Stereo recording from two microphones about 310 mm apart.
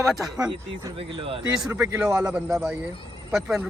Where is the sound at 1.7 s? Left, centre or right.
Centre.